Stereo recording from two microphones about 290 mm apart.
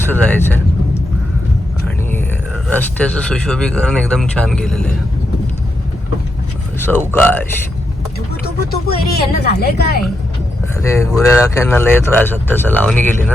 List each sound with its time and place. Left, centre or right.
0.1 s vehicle: centre
2.6 s speech: centre
6.7 s speech: centre
9.1 s a woman's voice: left
10.8 s speech: centre